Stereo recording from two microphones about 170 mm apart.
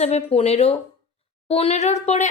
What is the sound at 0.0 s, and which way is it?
A woman's voice, 40° left (ahead or behind).